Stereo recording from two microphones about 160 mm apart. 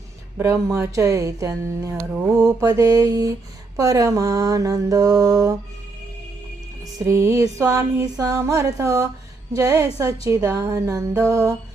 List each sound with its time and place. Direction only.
0.3 s speech: 20° right (ahead or behind)
7.0 s speech: 20° right (ahead or behind)